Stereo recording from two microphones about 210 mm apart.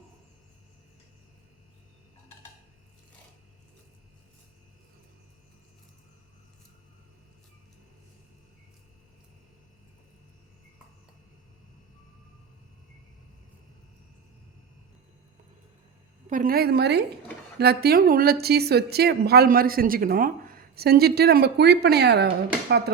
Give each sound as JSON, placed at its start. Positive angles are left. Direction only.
{"t": 16.2, "sound": "speech", "side_deg": -40}